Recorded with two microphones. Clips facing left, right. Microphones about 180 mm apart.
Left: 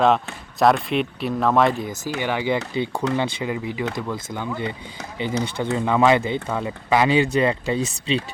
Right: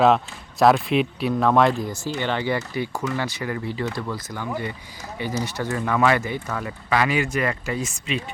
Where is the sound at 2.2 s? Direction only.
10° left (ahead or behind).